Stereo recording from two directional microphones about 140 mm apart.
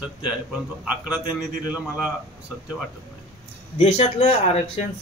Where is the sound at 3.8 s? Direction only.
50° left (ahead or behind).